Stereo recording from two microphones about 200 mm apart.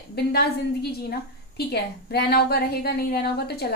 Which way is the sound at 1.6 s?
50° left (ahead or behind).